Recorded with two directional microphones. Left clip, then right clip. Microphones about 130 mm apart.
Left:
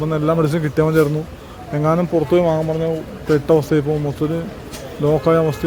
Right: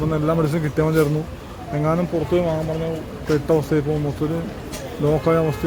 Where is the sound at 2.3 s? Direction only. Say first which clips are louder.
Left 5 dB; 50° left (ahead or behind).